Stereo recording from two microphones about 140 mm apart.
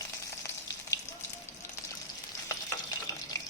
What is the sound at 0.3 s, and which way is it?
Frying, 20° left (ahead or behind).